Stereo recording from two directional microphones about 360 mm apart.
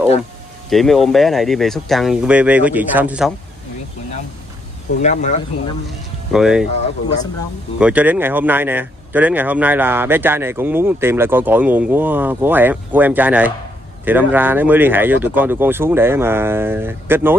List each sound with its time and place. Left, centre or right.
0.7 s speech: centre
5.0 s speech: centre
5.9 s speech: centre
7.8 s speech: centre